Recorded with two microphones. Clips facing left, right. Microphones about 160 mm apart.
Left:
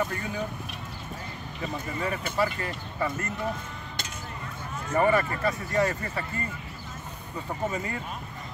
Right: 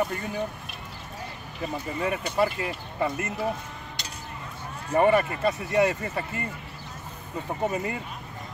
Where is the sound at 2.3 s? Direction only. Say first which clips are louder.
Right 3 dB; 15° right (ahead or behind).